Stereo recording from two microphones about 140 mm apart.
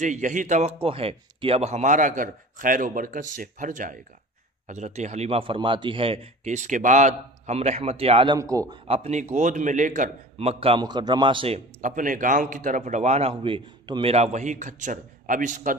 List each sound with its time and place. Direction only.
0.0 s speech: 60° right (ahead or behind)
4.6 s a man's voice: 55° right (ahead or behind)
5.4 s a man's voice: 35° right (ahead or behind)
8.4 s a man's voice: 25° right (ahead or behind)
8.8 s speech: 45° right (ahead or behind); by 10.1 s 65° right (ahead or behind)
10.3 s a man's voice: 45° right (ahead or behind)
10.8 s speech: 30° right (ahead or behind)
11.8 s speech: 70° right (ahead or behind)